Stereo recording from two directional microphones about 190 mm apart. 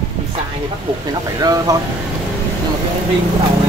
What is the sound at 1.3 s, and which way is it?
Speech, 20° right (ahead or behind).